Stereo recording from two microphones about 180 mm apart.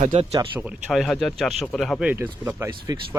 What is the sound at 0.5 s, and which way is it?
Speech, 5° right (ahead or behind).